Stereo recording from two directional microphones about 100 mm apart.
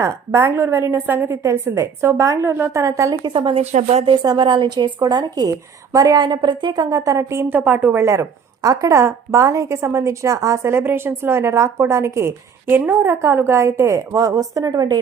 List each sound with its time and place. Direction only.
0.0 s a woman's voice: 30° right (ahead or behind)
3.2 s speech: 60° right (ahead or behind)
4.2 s a woman's voice: 45° right (ahead or behind)
6.9 s a woman's voice: 35° right (ahead or behind)
7.5 s speech: 15° right (ahead or behind)
8.0 s a woman's voice: 30° right (ahead or behind)